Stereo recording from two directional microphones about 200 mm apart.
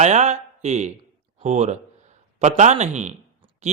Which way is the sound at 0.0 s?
35° right (ahead or behind).